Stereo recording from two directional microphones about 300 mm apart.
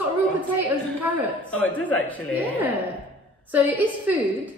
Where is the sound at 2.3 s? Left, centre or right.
Centre.